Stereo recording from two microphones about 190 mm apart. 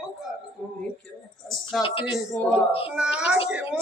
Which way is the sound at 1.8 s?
30° left (ahead or behind).